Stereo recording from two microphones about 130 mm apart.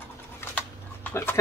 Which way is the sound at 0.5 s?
15° left (ahead or behind).